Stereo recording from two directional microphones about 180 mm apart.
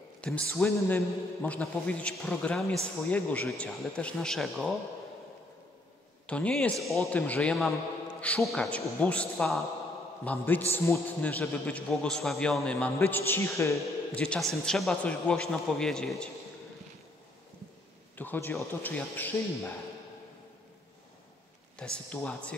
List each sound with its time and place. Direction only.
0.2 s a man's voice: 5° left (ahead or behind)
6.2 s a man's voice: 5° left (ahead or behind)
18.1 s a man's voice: 10° left (ahead or behind)
21.7 s a man's voice: 5° left (ahead or behind)